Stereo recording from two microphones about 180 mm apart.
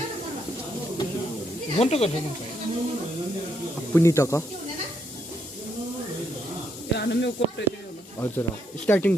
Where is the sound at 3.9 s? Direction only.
15° left (ahead or behind).